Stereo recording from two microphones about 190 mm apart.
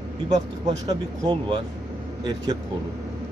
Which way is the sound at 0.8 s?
20° right (ahead or behind).